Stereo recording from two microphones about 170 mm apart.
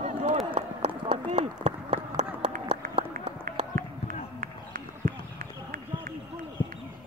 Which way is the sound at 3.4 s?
55° right (ahead or behind).